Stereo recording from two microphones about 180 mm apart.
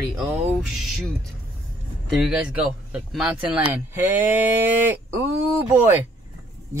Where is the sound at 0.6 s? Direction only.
Centre (ahead or behind).